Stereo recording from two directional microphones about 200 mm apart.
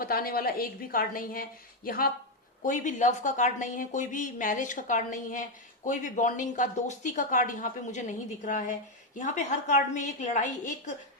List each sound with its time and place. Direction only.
0.0 s a woman's voice: 50° left (ahead or behind)